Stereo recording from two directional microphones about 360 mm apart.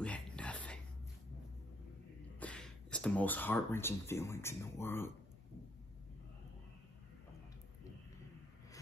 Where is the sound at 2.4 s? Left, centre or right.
Centre.